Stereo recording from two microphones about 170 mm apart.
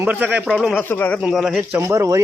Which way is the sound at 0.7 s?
10° left (ahead or behind).